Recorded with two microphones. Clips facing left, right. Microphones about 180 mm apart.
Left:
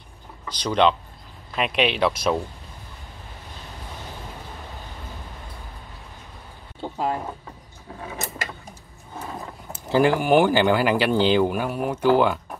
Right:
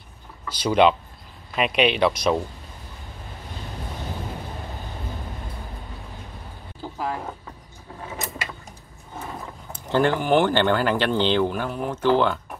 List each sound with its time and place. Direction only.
0.5 s speech: 10° right (ahead or behind)
6.8 s a sound: 25° left (ahead or behind)
9.7 s speech: 10° left (ahead or behind)